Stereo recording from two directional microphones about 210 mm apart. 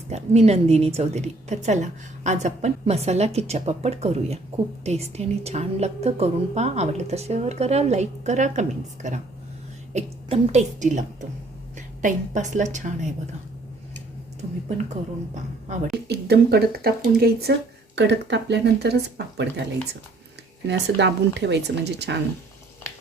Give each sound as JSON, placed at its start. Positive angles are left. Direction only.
{"t": 0.1, "sound": "a woman's voice", "side_deg": -30}
{"t": 14.4, "sound": "a woman's voice", "side_deg": -30}
{"t": 16.0, "sound": "speech", "side_deg": -50}
{"t": 20.7, "sound": "speech", "side_deg": -55}